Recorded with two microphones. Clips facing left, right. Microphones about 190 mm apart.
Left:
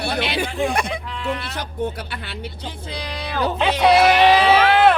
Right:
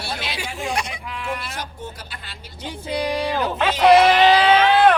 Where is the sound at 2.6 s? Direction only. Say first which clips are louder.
Right 11 dB; 10° right (ahead or behind).